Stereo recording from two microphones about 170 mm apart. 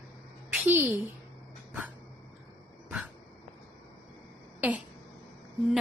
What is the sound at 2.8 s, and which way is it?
Dog, 10° right (ahead or behind).